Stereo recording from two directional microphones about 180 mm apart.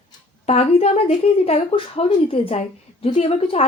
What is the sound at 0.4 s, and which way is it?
A woman's voice, 35° left (ahead or behind).